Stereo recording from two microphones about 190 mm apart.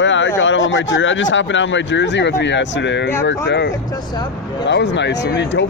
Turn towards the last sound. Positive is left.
turn(degrees=70)  # may be behind; listen again after turning